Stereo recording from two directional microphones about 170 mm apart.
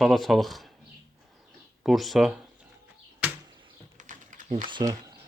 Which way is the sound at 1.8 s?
Centre (ahead or behind).